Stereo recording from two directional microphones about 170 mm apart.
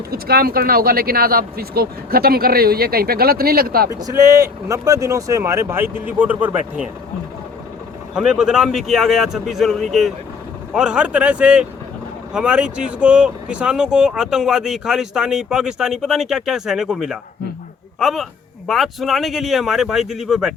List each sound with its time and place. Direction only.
0.1 s speech: 65° right (ahead or behind)
3.8 s speech: 20° right (ahead or behind)
8.1 s speech: 5° right (ahead or behind)